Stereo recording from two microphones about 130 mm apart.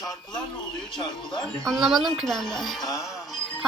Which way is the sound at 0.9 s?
35° left (ahead or behind).